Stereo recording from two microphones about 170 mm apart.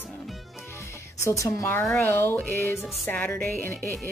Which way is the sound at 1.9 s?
15° left (ahead or behind).